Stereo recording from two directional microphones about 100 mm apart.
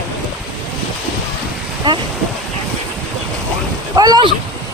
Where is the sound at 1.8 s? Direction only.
45° right (ahead or behind).